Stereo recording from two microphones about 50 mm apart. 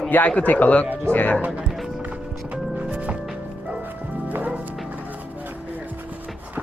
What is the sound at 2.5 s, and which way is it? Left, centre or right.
Music, right.